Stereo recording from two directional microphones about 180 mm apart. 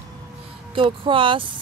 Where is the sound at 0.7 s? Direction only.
30° right (ahead or behind).